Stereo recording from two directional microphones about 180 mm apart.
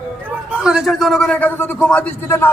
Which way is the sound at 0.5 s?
5° right (ahead or behind).